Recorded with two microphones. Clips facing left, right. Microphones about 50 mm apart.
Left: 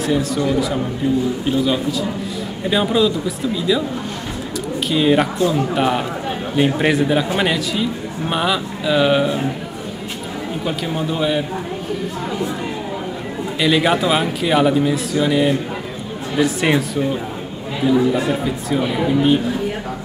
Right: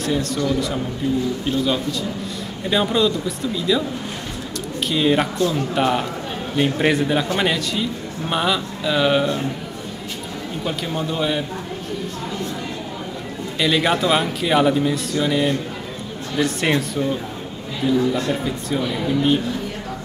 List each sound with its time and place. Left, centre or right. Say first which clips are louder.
0.0 s speech: left 3 dB; centre
1.4 s speech: left 3 dB; centre
4.8 s speech: left 3 dB; centre
10.6 s speech: left 1 dB; centre
13.6 s speech: left 2 dB; centre
18.8 s speech: left 4 dB; centre